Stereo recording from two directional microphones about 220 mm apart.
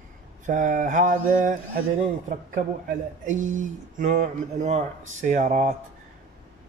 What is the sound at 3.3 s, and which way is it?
Speech, 35° right (ahead or behind).